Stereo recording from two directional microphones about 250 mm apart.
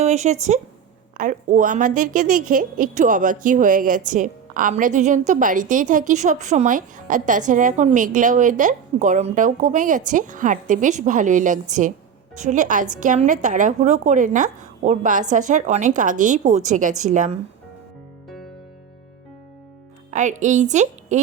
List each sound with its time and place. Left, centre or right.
0.0 s a woman's voice: right
20.1 s a woman's voice: right